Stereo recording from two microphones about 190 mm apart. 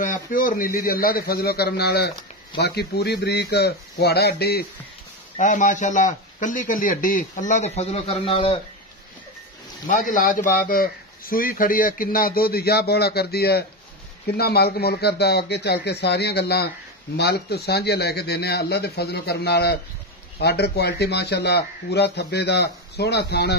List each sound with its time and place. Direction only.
0.0 s a man's voice: 45° left (ahead or behind)
5.4 s a man's voice: 40° left (ahead or behind)
9.8 s a man's voice: 45° left (ahead or behind); by 23.5 s 60° left (ahead or behind)